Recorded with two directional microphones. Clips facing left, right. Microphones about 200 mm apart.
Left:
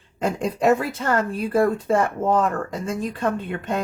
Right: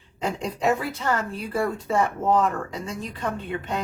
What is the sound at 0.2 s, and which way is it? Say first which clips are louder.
Speech: left 4 dB; 50° left (ahead or behind).